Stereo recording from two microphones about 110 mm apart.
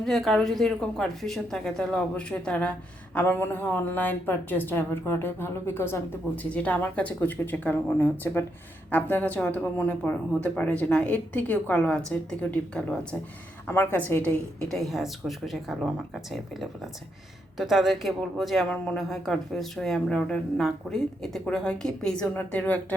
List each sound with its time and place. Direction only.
0.0 s a woman's voice: centre (ahead or behind)
14.8 s speech: centre (ahead or behind)